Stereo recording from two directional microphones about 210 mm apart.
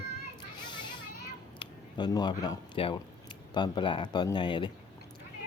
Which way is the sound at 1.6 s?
20° left (ahead or behind).